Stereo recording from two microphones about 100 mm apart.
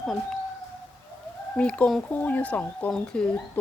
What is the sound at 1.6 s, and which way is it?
Speech, 10° left (ahead or behind).